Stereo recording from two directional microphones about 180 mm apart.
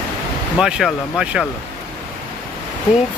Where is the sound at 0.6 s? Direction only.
Centre (ahead or behind).